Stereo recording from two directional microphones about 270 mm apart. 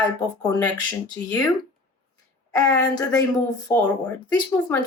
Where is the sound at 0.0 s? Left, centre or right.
Centre.